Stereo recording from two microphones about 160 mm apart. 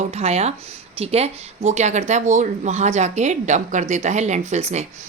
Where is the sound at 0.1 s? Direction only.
40° right (ahead or behind).